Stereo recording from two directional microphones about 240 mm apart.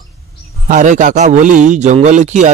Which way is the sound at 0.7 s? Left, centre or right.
Right.